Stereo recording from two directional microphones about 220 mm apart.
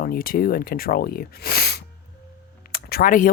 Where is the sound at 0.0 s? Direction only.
40° left (ahead or behind).